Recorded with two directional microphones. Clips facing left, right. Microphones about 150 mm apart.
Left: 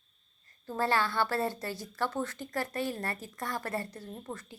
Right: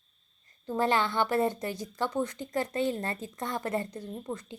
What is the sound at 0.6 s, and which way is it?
A woman's voice, 20° right (ahead or behind).